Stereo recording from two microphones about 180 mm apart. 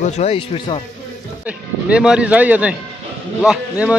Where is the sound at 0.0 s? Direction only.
35° left (ahead or behind).